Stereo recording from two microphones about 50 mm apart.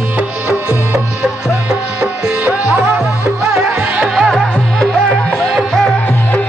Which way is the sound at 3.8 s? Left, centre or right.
Right.